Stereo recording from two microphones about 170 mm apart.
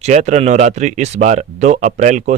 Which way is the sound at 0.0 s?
45° right (ahead or behind).